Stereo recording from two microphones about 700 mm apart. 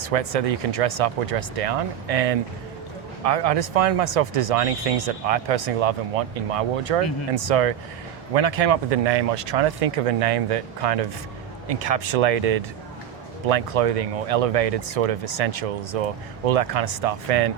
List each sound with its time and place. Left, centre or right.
0.0 s speech: right